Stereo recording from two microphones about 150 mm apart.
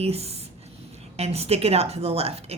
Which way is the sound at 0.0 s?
45° right (ahead or behind).